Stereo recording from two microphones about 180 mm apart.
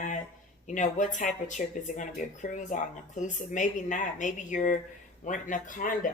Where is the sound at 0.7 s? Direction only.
45° left (ahead or behind).